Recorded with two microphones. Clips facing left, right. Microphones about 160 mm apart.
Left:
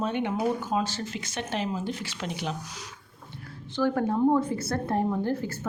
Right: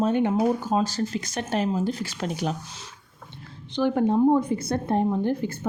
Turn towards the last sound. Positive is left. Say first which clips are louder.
# right 3 dB
turn(degrees=-20)  # may be behind; listen again after turning